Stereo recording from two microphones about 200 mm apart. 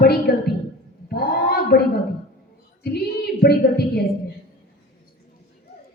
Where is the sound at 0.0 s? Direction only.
50° left (ahead or behind).